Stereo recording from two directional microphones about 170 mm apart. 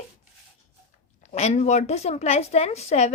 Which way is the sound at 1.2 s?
40° left (ahead or behind).